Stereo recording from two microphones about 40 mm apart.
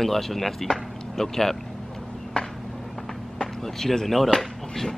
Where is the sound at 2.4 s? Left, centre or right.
Left.